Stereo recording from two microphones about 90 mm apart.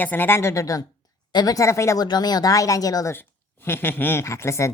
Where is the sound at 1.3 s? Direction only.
45° left (ahead or behind).